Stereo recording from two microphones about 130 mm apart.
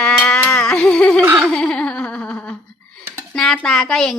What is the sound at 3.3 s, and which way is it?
Speech, 5° left (ahead or behind).